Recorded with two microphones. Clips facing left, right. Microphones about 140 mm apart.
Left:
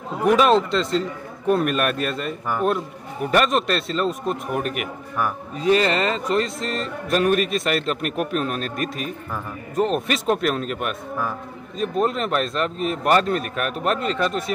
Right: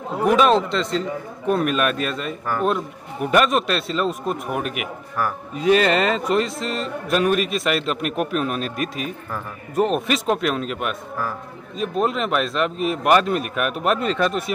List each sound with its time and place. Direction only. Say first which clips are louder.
0.2 s a man's voice: even; centre (ahead or behind)
5.6 s speech: right 2 dB; 25° left (ahead or behind)
6.2 s a man's voice: right 1 dB; 10° right (ahead or behind)
14.0 s speech: right 2 dB; 25° left (ahead or behind)